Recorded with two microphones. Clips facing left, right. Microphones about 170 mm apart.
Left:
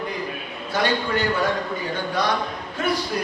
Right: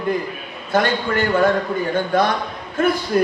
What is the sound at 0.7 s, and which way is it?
A man's voice, 50° right (ahead or behind).